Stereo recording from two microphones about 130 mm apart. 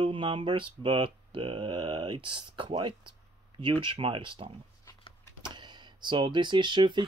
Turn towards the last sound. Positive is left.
turn(degrees=-35)  # may be behind; listen again after turning